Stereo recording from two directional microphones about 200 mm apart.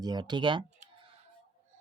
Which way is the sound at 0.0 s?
20° right (ahead or behind).